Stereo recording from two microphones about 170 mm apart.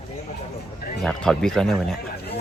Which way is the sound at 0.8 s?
60° left (ahead or behind).